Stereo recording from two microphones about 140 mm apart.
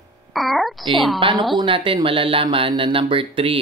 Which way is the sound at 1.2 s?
40° right (ahead or behind).